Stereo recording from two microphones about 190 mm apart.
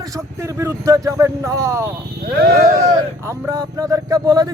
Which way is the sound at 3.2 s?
15° right (ahead or behind).